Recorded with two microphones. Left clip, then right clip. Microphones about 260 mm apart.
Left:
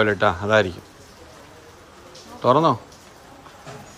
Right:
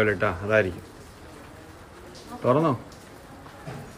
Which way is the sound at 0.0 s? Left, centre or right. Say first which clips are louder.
Left 5 dB; centre.